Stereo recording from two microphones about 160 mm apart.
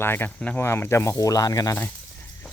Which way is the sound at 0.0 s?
15° left (ahead or behind).